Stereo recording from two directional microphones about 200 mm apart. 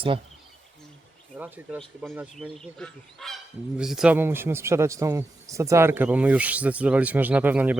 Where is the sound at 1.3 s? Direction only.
10° right (ahead or behind).